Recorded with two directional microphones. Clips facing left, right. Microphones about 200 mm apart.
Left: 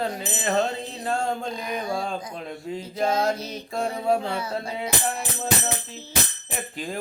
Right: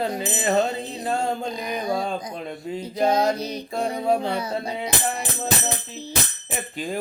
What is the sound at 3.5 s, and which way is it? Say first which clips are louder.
Music: right 2 dB; centre (ahead or behind).